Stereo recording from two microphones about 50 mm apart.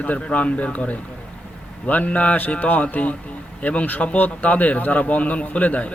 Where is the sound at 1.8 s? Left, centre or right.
Left.